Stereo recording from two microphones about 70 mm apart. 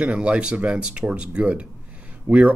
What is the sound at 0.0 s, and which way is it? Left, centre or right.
Speech, centre.